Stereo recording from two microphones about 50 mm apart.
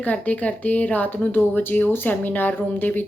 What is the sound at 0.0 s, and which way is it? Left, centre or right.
Speech, left.